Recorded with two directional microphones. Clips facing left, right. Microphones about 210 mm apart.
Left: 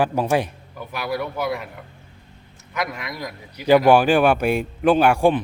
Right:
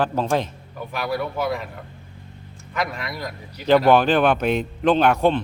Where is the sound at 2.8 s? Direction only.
10° left (ahead or behind).